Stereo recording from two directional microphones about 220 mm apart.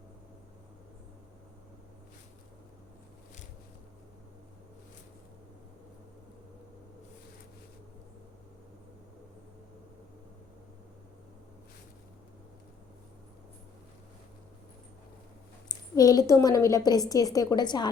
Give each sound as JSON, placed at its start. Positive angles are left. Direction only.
{"t": 15.7, "sound": "a woman's voice", "side_deg": 15}